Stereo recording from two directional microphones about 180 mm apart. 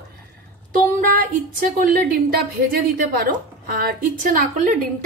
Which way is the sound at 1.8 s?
55° right (ahead or behind).